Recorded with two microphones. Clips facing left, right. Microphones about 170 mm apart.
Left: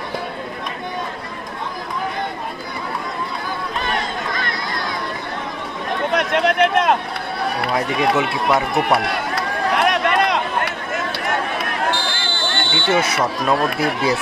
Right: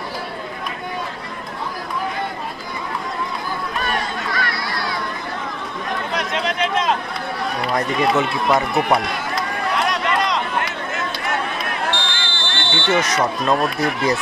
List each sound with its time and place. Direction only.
4.3 s chatter: 20° left (ahead or behind)
6.1 s a sound: 60° left (ahead or behind)
7.7 s speech: 5° left (ahead or behind)
9.1 s a sound: 60° left (ahead or behind)
11.9 s smoke detector: 45° left (ahead or behind)
13.0 s speech: 5° left (ahead or behind)